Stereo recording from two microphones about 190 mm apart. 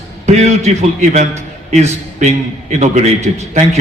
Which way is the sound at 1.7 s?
35° right (ahead or behind).